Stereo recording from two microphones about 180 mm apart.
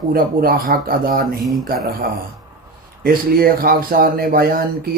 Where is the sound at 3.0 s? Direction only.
55° right (ahead or behind).